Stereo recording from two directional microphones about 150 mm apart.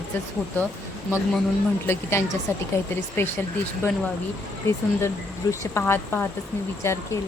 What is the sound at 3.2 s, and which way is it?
Speech, 15° left (ahead or behind).